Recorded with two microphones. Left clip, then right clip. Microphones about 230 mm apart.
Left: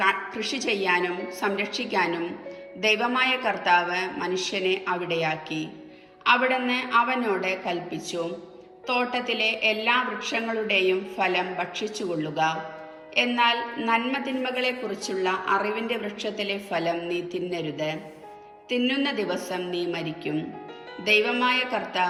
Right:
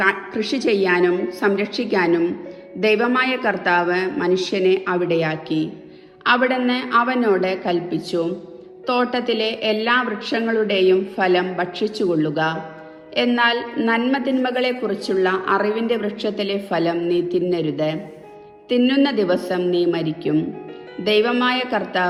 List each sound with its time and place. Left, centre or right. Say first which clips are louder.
0.0 s a woman's voice: right 4 dB; centre
9.0 s a woman's voice: right 4 dB; right
14.1 s a woman's voice: right 8 dB; right